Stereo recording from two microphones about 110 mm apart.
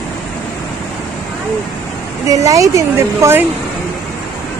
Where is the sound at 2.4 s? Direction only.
30° right (ahead or behind).